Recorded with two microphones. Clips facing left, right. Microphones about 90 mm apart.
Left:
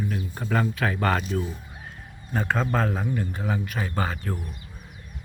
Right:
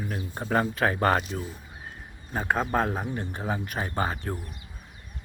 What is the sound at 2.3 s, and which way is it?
A man's voice, 15° right (ahead or behind).